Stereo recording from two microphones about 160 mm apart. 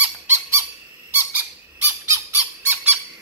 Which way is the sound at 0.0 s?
15° right (ahead or behind).